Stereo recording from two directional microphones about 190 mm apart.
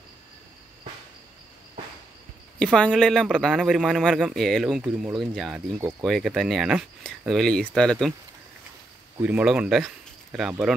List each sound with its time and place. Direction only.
2.6 s a man's voice: 5° left (ahead or behind)
5.8 s speech: 15° right (ahead or behind)
6.0 s a man's voice: centre (ahead or behind)
9.2 s speech: 5° right (ahead or behind)